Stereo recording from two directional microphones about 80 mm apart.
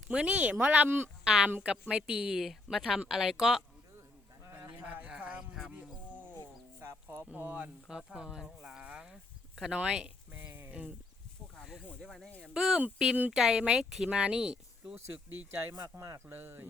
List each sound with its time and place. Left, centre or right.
0.1 s speech: centre
1.2 s a woman's voice: centre
4.8 s a sound: right
5.7 s wild animals: right
6.8 s a sound: right
7.3 s speech: right
7.9 s speech: centre
10.3 s a sound: right
10.7 s speech: centre
12.0 s speech: centre
14.9 s speech: right